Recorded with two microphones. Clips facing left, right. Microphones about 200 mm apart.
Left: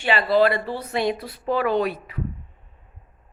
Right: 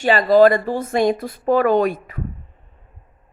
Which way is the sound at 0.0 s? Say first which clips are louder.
Right 6 dB; 45° right (ahead or behind).